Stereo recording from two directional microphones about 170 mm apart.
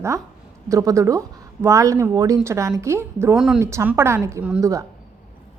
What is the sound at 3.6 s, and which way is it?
Speech, 15° right (ahead or behind).